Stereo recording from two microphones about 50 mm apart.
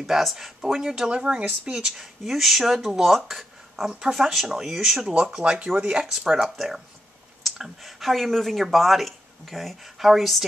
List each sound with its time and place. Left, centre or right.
0.0 s speech: centre
2.0 s speech: centre
5.1 s speech: right
6.1 s speech: centre